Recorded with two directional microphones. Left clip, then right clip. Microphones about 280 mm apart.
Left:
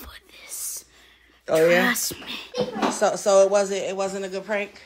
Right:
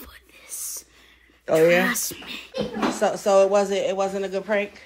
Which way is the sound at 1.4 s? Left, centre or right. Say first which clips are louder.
Even; centre.